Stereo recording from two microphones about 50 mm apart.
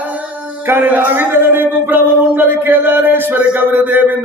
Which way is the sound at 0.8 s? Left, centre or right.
Right.